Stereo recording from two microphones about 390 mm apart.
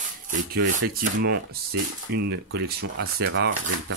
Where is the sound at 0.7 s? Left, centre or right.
Right.